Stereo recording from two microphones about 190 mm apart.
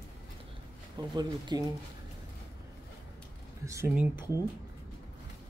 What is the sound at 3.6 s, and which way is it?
Speech, 15° right (ahead or behind).